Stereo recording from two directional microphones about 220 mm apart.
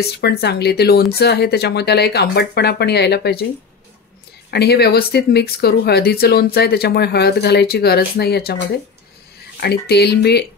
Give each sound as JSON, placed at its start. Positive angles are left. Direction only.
{"t": 0.0, "sound": "speech", "side_deg": 45}
{"t": 4.5, "sound": "speech", "side_deg": 50}
{"t": 9.6, "sound": "speech", "side_deg": 45}